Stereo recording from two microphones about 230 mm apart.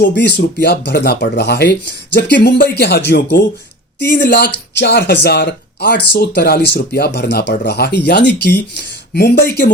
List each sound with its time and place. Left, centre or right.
0.1 s speech: left